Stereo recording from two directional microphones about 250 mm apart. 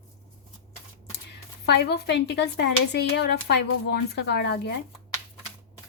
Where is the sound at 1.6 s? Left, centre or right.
Left.